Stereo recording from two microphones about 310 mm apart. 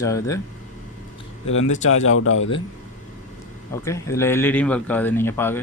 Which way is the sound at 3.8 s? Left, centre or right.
Centre.